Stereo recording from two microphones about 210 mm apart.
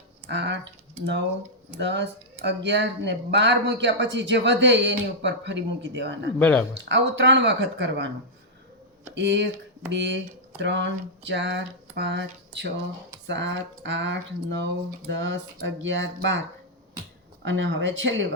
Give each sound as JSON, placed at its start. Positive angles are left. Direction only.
{"t": 0.3, "sound": "speech", "side_deg": -55}
{"t": 6.4, "sound": "speech", "side_deg": 5}
{"t": 6.7, "sound": "speech", "side_deg": -60}
{"t": 9.1, "sound": "speech", "side_deg": -55}
{"t": 17.4, "sound": "speech", "side_deg": -60}